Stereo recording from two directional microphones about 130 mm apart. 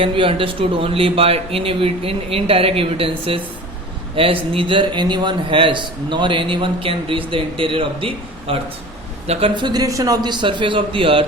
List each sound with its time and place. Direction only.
0.0 s a man's voice: 45° right (ahead or behind)
9.6 s a man's voice: 35° right (ahead or behind)